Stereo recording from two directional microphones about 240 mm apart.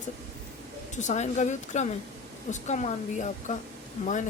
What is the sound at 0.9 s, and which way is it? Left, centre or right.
A woman's voice, left.